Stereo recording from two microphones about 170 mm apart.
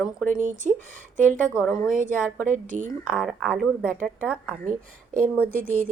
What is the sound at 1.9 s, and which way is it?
A woman's voice, 50° right (ahead or behind).